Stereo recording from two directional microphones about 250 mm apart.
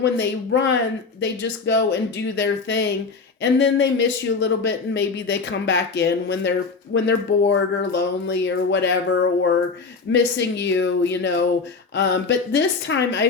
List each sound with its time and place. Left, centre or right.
0.0 s speech: left